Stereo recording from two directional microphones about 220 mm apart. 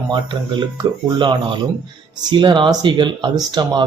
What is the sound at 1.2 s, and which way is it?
Speech, 20° right (ahead or behind).